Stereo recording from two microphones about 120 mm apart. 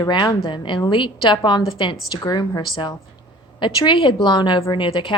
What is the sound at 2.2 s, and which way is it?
Speech, 35° left (ahead or behind).